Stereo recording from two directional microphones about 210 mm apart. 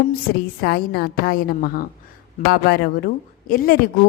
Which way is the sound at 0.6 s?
50° left (ahead or behind).